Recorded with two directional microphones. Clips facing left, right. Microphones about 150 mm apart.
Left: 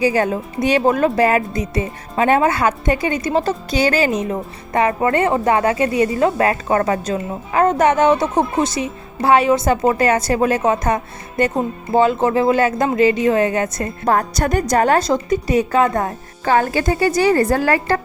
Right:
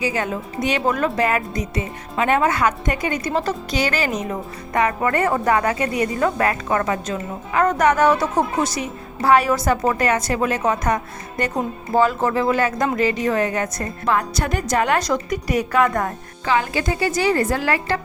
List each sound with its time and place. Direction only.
0.0 s a woman's voice: 35° left (ahead or behind)
14.1 s a woman's voice: 40° left (ahead or behind)
16.4 s speech: 45° left (ahead or behind)